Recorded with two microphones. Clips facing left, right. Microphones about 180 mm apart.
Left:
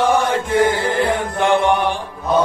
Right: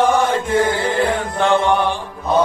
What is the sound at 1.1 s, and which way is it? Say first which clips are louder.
Mantra: even; 15° left (ahead or behind).